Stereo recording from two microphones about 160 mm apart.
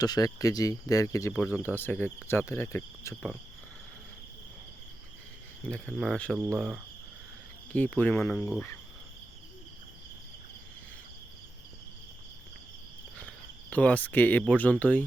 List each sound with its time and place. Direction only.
0.0 s speech: 25° left (ahead or behind)
5.6 s speech: 5° left (ahead or behind)
7.7 s speech: 10° left (ahead or behind)
13.1 s speech: 10° left (ahead or behind)